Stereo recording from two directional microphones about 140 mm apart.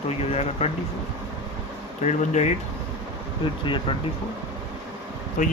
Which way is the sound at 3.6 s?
35° left (ahead or behind).